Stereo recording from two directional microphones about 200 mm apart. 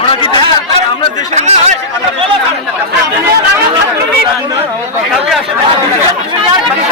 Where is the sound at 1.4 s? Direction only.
35° right (ahead or behind).